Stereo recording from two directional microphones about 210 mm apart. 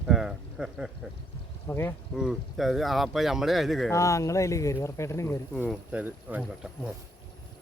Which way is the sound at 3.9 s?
15° left (ahead or behind).